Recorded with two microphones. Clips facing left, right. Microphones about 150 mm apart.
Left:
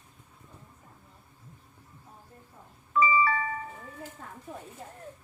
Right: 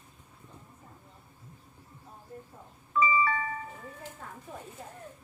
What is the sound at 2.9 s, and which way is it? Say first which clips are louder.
Doorbell: left 2 dB; 70° left (ahead or behind).